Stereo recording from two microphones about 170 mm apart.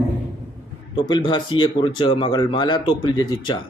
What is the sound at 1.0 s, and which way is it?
Speech, 30° left (ahead or behind).